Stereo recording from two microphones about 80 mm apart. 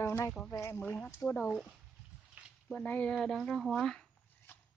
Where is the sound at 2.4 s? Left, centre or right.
Centre.